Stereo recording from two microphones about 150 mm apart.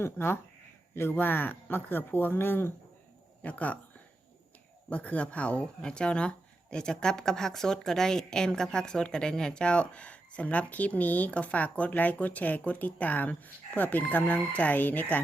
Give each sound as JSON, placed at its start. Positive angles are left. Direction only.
{"t": 0.0, "sound": "speech", "side_deg": 15}
{"t": 4.9, "sound": "speech", "side_deg": 10}